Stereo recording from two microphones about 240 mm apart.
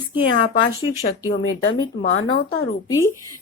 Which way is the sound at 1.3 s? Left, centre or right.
Left.